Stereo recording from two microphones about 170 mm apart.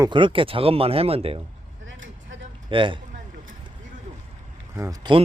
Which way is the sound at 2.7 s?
30° right (ahead or behind).